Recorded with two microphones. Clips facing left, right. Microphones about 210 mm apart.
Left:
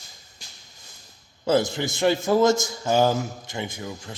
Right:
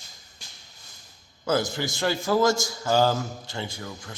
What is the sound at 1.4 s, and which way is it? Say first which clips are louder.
A man's voice: left 4 dB; 25° left (ahead or behind).